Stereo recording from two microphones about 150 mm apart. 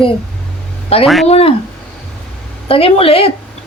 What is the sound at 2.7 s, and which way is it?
Speech, 40° left (ahead or behind).